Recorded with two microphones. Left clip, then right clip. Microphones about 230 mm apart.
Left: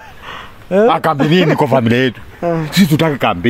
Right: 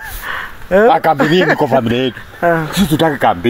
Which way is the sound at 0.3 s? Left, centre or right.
Centre.